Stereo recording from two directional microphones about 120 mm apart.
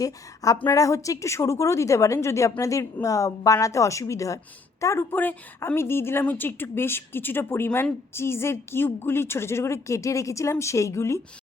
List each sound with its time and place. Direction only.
0.0 s a woman's voice: 30° left (ahead or behind)
5.1 s a woman's voice: 15° left (ahead or behind)